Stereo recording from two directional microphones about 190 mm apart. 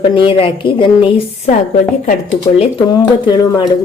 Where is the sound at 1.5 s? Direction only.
45° left (ahead or behind).